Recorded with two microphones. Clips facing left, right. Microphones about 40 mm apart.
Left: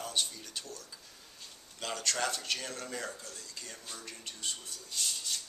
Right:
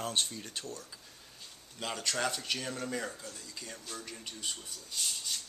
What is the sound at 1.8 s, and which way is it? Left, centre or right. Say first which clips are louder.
Speech: even; centre.